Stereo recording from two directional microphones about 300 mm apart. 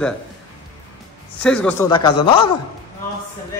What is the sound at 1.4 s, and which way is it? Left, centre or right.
Speech, centre.